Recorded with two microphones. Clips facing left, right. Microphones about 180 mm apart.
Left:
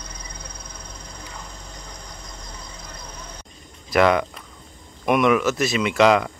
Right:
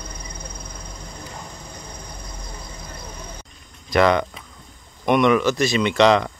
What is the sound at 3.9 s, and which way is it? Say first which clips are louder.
Speech: even; 5° left (ahead or behind).